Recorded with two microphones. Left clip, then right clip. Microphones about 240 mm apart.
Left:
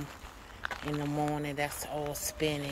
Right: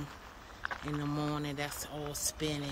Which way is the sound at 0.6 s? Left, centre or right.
Left.